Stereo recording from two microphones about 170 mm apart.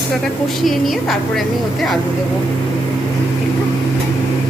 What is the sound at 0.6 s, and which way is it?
Chopping, centre (ahead or behind).